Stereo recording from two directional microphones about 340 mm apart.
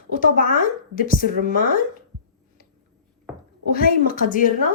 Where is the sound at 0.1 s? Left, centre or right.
Left.